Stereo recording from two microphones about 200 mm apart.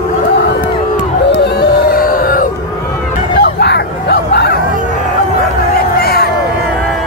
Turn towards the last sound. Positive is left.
turn(degrees=50)  # may be behind; listen again after turning